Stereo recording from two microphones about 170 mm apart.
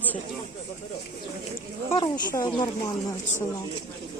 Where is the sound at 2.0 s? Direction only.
20° left (ahead or behind).